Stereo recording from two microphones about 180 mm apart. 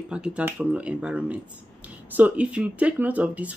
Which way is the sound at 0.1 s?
5° right (ahead or behind).